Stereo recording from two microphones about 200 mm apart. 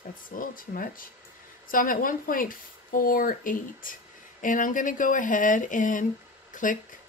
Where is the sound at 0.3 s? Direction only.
45° left (ahead or behind).